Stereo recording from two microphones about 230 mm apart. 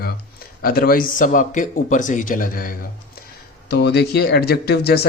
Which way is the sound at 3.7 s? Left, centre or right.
Left.